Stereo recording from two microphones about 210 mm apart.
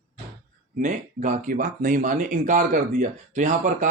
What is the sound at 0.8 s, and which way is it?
Speech, 35° right (ahead or behind).